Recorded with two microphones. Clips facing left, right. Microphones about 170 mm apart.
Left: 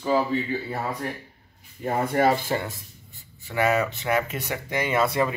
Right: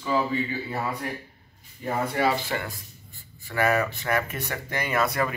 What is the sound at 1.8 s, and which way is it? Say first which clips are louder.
Speech: left 3 dB; 50° left (ahead or behind).